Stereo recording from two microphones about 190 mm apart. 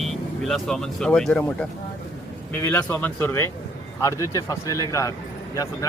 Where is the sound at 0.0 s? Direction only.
Centre (ahead or behind).